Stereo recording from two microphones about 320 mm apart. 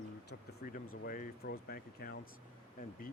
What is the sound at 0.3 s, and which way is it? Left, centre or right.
Speech, left.